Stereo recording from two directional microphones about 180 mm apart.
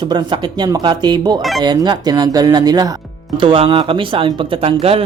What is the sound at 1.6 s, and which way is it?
Speech, 25° right (ahead or behind).